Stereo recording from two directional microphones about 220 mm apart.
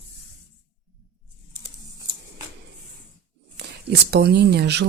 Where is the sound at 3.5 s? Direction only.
50° right (ahead or behind).